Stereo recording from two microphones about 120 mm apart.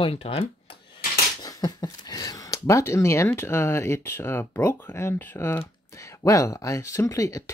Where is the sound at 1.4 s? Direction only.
35° left (ahead or behind).